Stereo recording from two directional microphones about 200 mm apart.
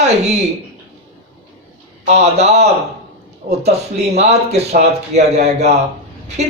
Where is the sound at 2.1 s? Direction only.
35° right (ahead or behind).